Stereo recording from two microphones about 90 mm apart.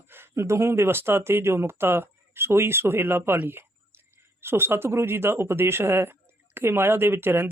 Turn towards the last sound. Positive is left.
turn(degrees=-25)  # may be behind; listen again after turning